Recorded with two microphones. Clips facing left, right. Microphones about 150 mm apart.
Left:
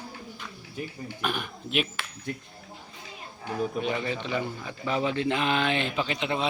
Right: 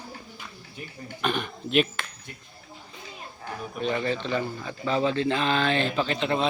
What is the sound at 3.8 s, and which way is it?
Speech, 15° left (ahead or behind).